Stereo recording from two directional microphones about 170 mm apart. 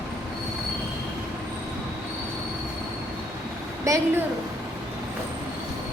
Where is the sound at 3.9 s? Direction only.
20° right (ahead or behind).